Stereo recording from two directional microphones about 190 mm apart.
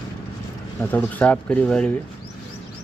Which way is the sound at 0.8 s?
10° left (ahead or behind).